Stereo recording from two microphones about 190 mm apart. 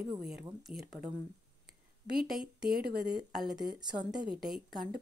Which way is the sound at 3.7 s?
25° right (ahead or behind).